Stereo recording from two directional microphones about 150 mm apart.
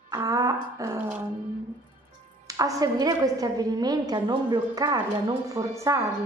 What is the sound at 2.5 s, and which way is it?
Speech, 25° right (ahead or behind).